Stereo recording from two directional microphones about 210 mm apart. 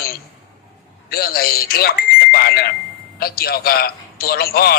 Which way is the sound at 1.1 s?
45° left (ahead or behind).